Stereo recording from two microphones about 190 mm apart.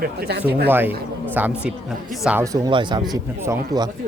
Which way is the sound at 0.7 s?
10° right (ahead or behind).